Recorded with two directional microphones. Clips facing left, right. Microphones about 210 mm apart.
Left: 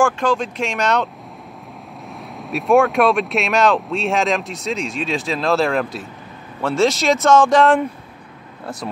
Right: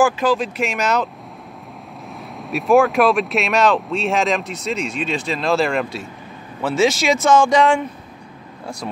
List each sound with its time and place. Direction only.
0.0 s speech: 5° right (ahead or behind)
2.3 s speech: centre (ahead or behind)